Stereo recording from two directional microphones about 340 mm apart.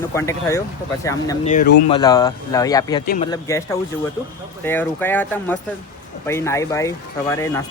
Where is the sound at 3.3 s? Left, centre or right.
Centre.